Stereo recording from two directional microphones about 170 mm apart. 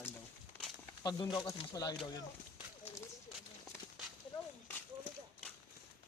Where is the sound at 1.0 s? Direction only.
25° left (ahead or behind).